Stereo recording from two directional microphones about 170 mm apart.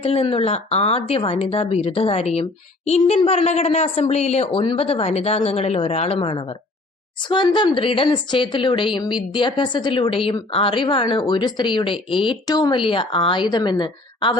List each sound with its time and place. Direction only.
0.0 s a woman's voice: 35° left (ahead or behind)